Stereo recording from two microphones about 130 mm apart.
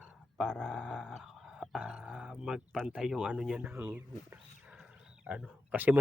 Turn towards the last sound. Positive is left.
turn(degrees=-15)  # may be behind; listen again after turning